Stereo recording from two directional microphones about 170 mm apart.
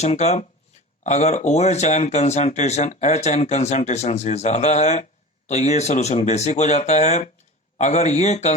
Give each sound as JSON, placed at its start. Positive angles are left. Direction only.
{"t": 0.0, "sound": "speech", "side_deg": 40}